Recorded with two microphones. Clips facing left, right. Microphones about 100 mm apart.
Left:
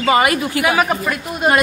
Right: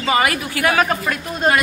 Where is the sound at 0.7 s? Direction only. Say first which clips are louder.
Left 1 dB; 10° left (ahead or behind).